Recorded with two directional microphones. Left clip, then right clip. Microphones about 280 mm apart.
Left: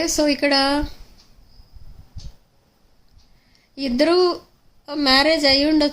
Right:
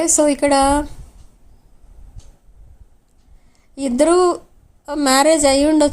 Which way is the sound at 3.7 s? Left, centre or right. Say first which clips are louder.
Right 3 dB; centre.